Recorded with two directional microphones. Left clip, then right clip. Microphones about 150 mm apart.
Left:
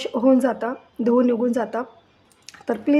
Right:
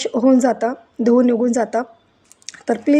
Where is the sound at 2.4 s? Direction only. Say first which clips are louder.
Right 4 dB; 25° right (ahead or behind).